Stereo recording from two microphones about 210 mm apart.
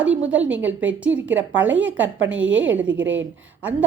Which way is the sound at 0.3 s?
5° right (ahead or behind).